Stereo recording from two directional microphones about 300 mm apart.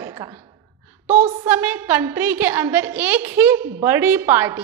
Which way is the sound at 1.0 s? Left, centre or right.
Right.